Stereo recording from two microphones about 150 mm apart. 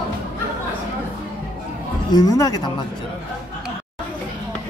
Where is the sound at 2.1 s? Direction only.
25° left (ahead or behind).